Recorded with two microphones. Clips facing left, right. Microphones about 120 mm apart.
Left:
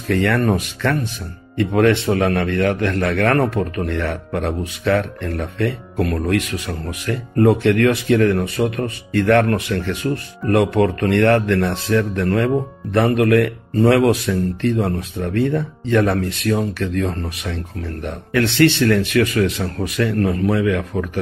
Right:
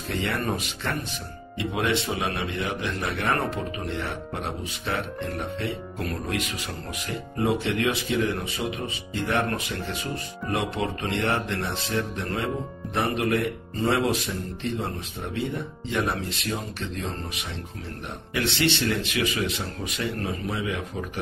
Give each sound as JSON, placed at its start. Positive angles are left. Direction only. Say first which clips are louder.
{"t": 0.1, "sound": "speech", "louder": "left 10 dB", "side_deg": 75}
{"t": 1.8, "sound": "speech", "louder": "left 11 dB", "side_deg": 75}
{"t": 3.8, "sound": "speech", "louder": "left 8 dB", "side_deg": 90}
{"t": 7.1, "sound": "speech", "louder": "left 10 dB", "side_deg": 70}
{"t": 10.4, "sound": "speech", "louder": "left 12 dB", "side_deg": 80}
{"t": 15.4, "sound": "speech", "louder": "left 10 dB", "side_deg": 85}
{"t": 18.0, "sound": "speech", "louder": "left 9 dB", "side_deg": 90}
{"t": 18.8, "sound": "speech", "louder": "left 10 dB", "side_deg": 65}